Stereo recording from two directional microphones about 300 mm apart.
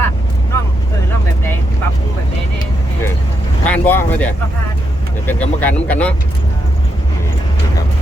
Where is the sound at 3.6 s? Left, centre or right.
Centre.